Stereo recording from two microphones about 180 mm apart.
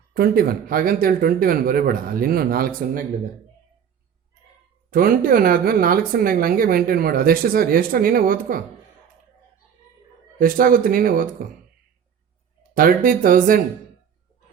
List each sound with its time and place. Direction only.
0.1 s speech: 55° right (ahead or behind)
4.9 s speech: 50° right (ahead or behind)
10.3 s speech: 50° right (ahead or behind)
12.7 s speech: 50° right (ahead or behind)